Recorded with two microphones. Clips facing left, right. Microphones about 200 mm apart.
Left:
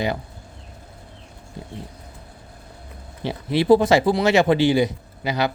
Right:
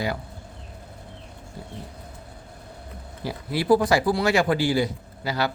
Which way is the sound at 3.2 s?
25° left (ahead or behind).